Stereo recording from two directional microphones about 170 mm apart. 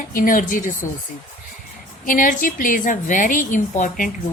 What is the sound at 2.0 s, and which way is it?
A woman's voice, 50° left (ahead or behind).